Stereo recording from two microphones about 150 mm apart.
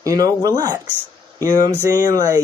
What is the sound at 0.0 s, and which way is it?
Speech, 25° right (ahead or behind).